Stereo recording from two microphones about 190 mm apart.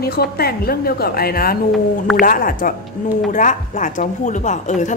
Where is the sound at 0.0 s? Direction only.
55° left (ahead or behind).